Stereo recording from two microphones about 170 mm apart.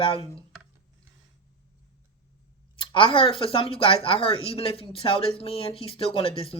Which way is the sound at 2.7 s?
30° left (ahead or behind).